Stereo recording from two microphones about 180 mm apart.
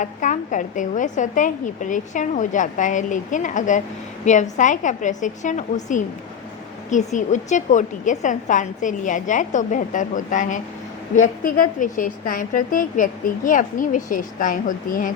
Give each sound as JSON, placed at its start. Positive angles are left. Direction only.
{"t": 0.0, "sound": "a woman's voice", "side_deg": 45}